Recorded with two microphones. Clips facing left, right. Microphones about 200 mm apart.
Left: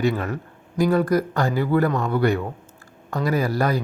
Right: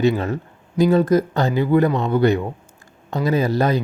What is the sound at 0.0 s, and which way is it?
Speech, 25° right (ahead or behind).